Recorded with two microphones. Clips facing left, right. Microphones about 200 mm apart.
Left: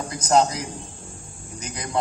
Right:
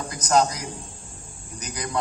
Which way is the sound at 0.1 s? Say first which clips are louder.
Left 2 dB; 25° left (ahead or behind).